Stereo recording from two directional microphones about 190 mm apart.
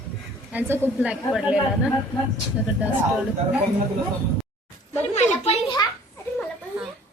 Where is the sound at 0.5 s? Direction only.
10° right (ahead or behind).